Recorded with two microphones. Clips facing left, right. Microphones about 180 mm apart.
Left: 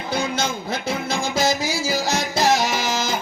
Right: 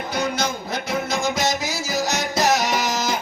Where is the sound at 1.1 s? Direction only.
30° left (ahead or behind).